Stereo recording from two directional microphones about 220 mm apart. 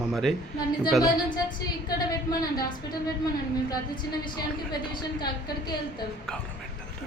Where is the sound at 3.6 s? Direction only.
20° left (ahead or behind).